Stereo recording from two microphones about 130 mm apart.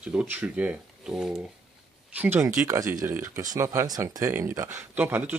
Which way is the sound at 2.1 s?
15° right (ahead or behind).